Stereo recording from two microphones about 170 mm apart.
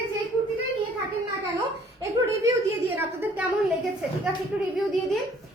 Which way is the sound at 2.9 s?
10° right (ahead or behind).